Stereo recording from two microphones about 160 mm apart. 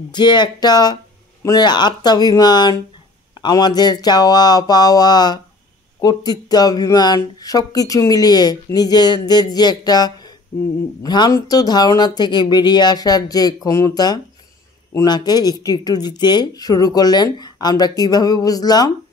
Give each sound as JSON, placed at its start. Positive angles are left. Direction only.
{"t": 0.1, "sound": "speech", "side_deg": 30}